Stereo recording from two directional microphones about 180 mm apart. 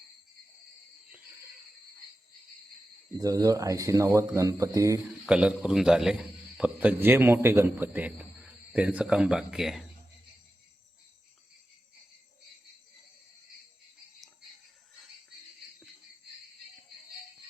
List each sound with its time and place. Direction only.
3.2 s speech: 20° right (ahead or behind)
5.2 s a man's voice: 5° right (ahead or behind)